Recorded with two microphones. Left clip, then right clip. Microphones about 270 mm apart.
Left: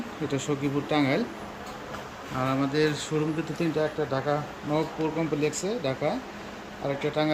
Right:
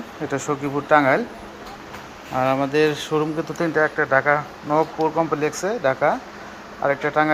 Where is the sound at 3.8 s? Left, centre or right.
Right.